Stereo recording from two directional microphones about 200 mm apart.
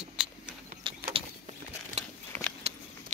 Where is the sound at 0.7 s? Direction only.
25° right (ahead or behind).